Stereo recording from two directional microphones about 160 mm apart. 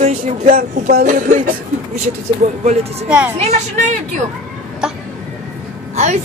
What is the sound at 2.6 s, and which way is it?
Speech, 40° right (ahead or behind).